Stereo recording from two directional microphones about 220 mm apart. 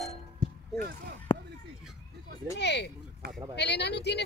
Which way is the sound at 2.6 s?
50° left (ahead or behind).